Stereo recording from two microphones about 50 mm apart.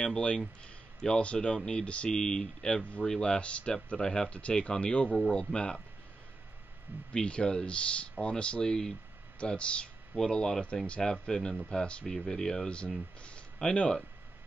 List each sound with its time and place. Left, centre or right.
0.0 s speech: centre
2.8 s speech: left
7.2 s speech: centre